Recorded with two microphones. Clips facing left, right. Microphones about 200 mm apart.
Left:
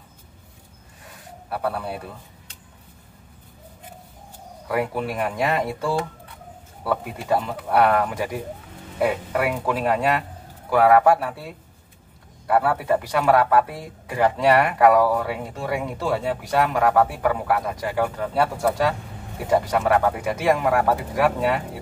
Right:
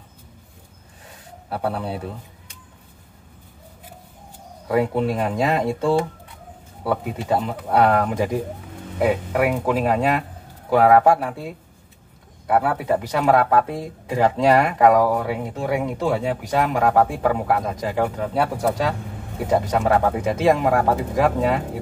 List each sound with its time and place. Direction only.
1.5 s speech: 25° right (ahead or behind)
4.6 s speech: 25° right (ahead or behind)